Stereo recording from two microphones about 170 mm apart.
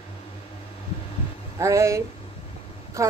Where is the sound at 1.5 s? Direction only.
20° right (ahead or behind).